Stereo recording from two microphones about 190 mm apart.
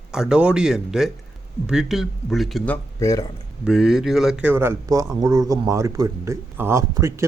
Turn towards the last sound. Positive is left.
turn(degrees=-15)  # may be behind; listen again after turning